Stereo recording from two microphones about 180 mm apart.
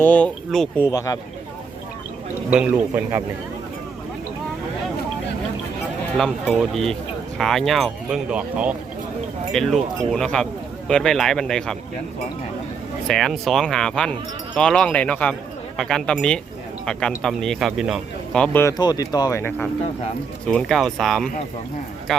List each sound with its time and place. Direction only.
0.0 s speech: 10° left (ahead or behind)
0.9 s speech: 20° left (ahead or behind)
2.5 s a man's voice: 5° right (ahead or behind)
6.1 s speech: centre (ahead or behind)
13.1 s speech: centre (ahead or behind)
18.8 s speech: 20° left (ahead or behind); by 21.2 s centre (ahead or behind)